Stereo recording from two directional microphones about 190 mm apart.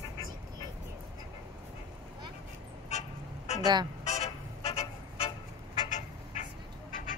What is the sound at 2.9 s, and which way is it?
Vehicle, 35° left (ahead or behind).